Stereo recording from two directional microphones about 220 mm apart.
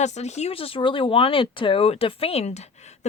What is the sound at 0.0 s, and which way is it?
Speech, 30° left (ahead or behind).